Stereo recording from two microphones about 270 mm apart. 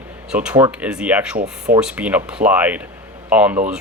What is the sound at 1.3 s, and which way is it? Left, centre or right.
Speech, right.